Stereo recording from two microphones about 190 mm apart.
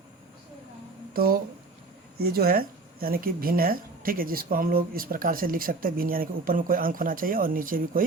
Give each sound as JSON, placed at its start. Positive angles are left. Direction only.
{"t": 1.1, "sound": "speech", "side_deg": -50}